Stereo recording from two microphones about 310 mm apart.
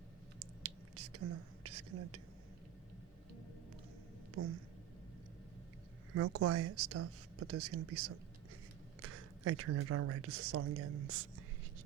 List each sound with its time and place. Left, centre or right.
0.3 s whispering: right
1.6 s a sound: right
4.4 s speech: right
6.1 s speech: right